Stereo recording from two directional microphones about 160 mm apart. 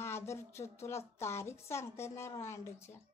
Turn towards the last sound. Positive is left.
turn(degrees=15)  # may be behind; listen again after turning